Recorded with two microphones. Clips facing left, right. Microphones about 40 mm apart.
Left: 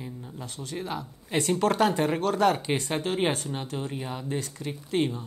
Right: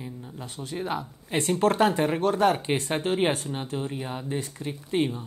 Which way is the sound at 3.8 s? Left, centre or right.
Centre.